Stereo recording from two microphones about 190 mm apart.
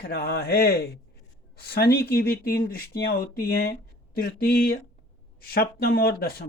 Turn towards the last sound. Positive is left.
turn(degrees=55)  # may be behind; listen again after turning